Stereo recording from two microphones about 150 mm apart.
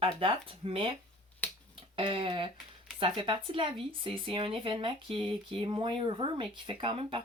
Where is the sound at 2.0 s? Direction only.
35° right (ahead or behind).